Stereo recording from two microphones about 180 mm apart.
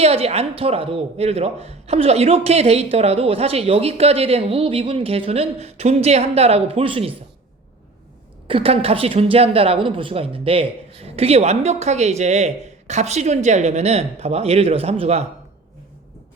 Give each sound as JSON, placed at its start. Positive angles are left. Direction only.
{"t": 0.0, "sound": "speech", "side_deg": -35}
{"t": 8.4, "sound": "speech", "side_deg": -30}